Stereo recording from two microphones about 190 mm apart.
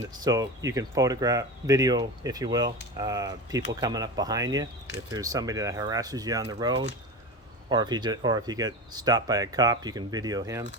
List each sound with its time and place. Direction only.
0.1 s speech: 20° right (ahead or behind)